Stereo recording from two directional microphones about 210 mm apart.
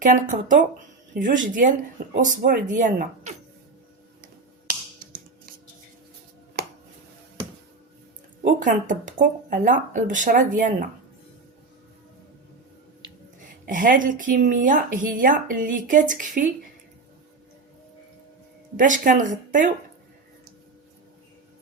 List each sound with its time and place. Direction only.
0.0 s speech: 35° right (ahead or behind)
8.5 s speech: 40° right (ahead or behind)
13.7 s speech: 40° right (ahead or behind)
18.8 s speech: 40° right (ahead or behind)